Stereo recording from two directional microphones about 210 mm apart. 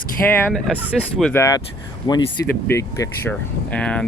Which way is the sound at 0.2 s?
5° left (ahead or behind).